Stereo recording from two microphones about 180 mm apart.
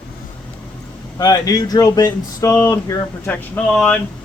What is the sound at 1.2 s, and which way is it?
Speech, 20° left (ahead or behind).